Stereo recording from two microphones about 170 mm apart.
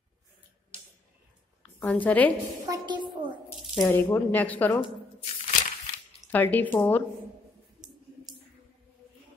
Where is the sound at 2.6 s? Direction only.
25° right (ahead or behind).